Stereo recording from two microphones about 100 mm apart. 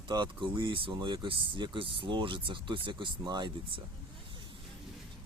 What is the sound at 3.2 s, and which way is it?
Speech, 45° right (ahead or behind).